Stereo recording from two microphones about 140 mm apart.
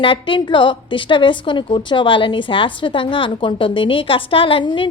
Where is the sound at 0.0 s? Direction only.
35° left (ahead or behind).